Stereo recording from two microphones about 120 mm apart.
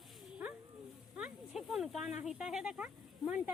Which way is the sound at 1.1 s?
5° right (ahead or behind).